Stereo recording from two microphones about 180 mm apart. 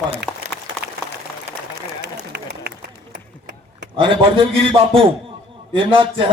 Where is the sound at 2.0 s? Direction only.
65° right (ahead or behind).